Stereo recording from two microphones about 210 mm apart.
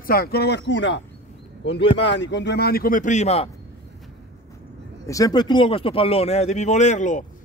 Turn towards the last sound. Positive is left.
turn(degrees=35)  # may be behind; listen again after turning